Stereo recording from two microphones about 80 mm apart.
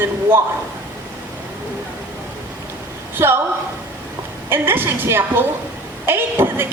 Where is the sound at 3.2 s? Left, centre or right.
Right.